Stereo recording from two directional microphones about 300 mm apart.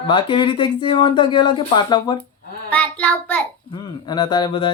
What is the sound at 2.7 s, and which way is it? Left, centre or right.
A child's voice, centre.